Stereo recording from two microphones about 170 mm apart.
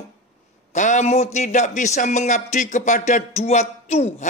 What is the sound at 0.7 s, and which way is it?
A man's voice, 45° left (ahead or behind).